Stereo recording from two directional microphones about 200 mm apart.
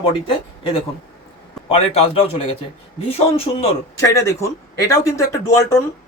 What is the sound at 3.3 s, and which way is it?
Speech, 30° left (ahead or behind).